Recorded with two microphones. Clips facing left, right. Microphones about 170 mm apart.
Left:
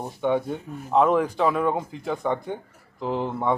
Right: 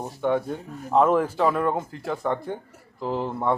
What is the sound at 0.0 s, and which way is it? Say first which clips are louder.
A man's voice: even; centre (ahead or behind).